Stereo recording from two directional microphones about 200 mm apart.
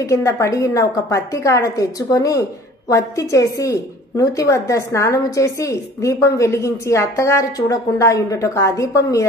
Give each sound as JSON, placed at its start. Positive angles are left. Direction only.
{"t": 0.0, "sound": "a woman's voice", "side_deg": 15}